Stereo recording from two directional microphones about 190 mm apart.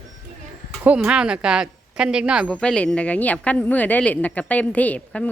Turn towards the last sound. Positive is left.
turn(degrees=5)  # may be behind; listen again after turning